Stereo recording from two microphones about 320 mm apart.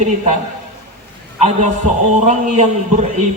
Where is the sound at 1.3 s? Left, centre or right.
Right.